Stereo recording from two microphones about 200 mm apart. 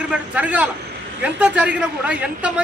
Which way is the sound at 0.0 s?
5° right (ahead or behind).